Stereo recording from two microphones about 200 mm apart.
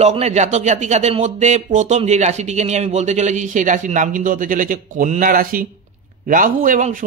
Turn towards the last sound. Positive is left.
turn(degrees=-40)  # may be behind; listen again after turning